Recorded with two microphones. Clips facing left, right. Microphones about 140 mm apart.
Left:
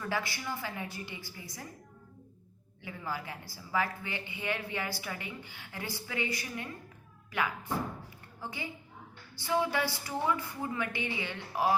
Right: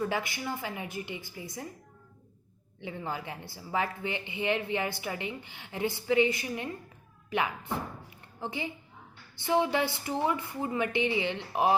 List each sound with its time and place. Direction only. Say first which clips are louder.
0.0 s a woman's voice: right 4 dB; 20° right (ahead or behind)
2.8 s a woman's voice: right 3 dB; 25° right (ahead or behind)